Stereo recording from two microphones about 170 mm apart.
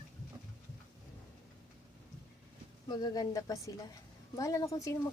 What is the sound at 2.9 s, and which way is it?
Speech, 25° left (ahead or behind).